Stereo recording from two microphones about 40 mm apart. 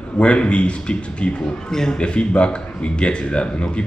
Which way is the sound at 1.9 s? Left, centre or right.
Left.